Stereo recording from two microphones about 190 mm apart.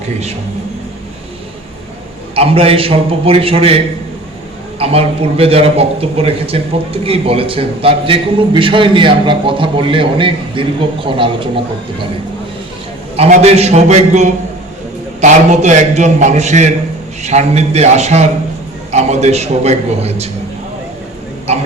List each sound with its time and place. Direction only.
2.3 s a man's voice: 30° right (ahead or behind)
4.8 s a man's voice: 30° right (ahead or behind)
13.1 s a man's voice: 35° right (ahead or behind)
21.5 s a sound: 35° right (ahead or behind)